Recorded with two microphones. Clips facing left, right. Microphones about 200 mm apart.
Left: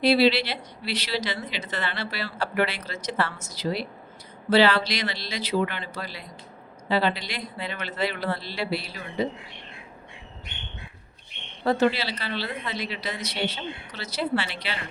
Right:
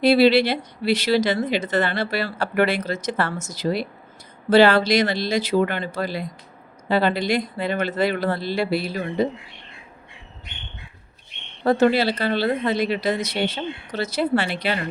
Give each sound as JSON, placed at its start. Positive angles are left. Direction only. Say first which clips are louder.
{"t": 0.0, "sound": "speech", "louder": "right 5 dB", "side_deg": -50}
{"t": 11.6, "sound": "speech", "louder": "right 5 dB", "side_deg": -50}